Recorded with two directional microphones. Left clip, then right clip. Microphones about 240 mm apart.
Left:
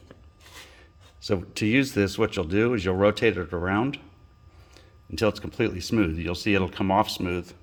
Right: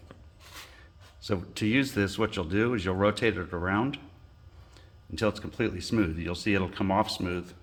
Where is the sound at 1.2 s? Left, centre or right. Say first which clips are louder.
Left 4 dB; left.